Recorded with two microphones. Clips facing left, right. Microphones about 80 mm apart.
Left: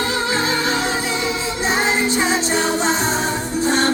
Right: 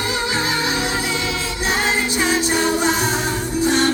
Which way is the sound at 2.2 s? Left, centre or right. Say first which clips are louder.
Even; left.